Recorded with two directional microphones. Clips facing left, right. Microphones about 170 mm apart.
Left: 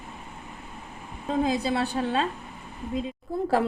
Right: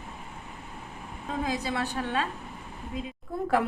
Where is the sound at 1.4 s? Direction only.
30° left (ahead or behind).